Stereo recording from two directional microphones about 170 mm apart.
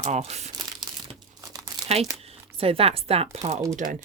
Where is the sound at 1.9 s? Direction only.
40° right (ahead or behind).